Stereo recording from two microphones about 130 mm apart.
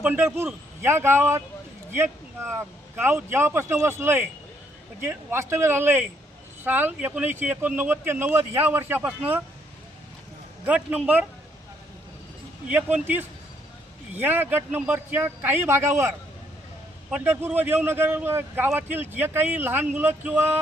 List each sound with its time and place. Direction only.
0.0 s a man's voice: 15° right (ahead or behind)
10.7 s a man's voice: 10° right (ahead or behind)
12.6 s a man's voice: 10° right (ahead or behind)